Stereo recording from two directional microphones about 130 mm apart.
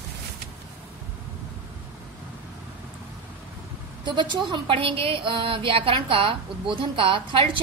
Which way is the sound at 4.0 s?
35° right (ahead or behind).